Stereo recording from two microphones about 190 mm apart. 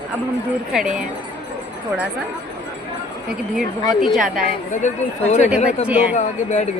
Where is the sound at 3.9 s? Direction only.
Centre (ahead or behind).